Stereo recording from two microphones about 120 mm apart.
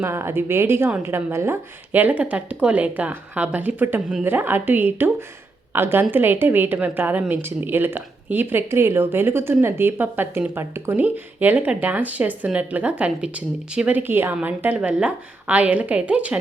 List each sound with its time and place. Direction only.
0.0 s a woman's voice: 20° right (ahead or behind)